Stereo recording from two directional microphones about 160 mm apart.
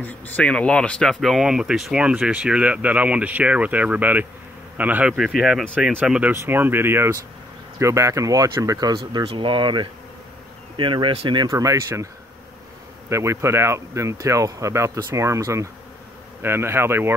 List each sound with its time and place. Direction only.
0.0 s speech: 10° left (ahead or behind); by 12.1 s 20° right (ahead or behind)
13.1 s speech: 15° right (ahead or behind)